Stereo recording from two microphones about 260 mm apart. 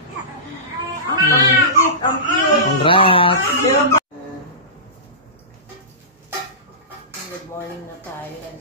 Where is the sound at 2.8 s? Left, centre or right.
Left.